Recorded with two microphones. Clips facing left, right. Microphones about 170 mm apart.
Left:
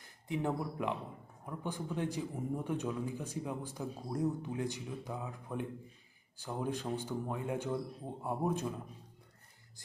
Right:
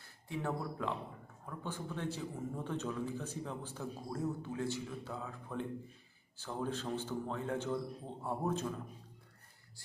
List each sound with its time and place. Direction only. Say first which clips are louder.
0.0 s a man's voice: left 4 dB; 15° left (ahead or behind)